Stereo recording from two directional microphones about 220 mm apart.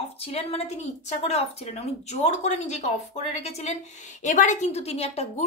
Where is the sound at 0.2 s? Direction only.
30° left (ahead or behind).